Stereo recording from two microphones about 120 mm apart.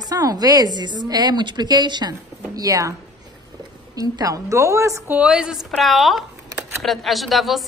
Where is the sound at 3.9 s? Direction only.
30° right (ahead or behind).